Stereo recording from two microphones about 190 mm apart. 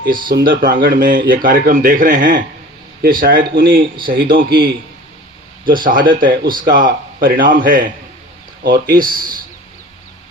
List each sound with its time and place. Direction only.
0.0 s speech: 50° right (ahead or behind)
3.9 s speech: 25° right (ahead or behind)
4.2 s speech: 50° right (ahead or behind)